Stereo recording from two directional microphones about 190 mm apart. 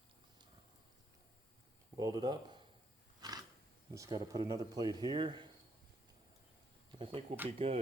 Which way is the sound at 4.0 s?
20° right (ahead or behind).